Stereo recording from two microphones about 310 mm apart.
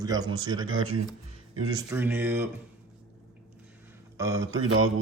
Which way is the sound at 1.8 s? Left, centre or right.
Centre.